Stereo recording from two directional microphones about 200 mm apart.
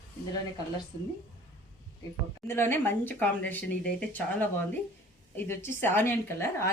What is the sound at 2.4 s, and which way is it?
A woman's voice, 10° left (ahead or behind).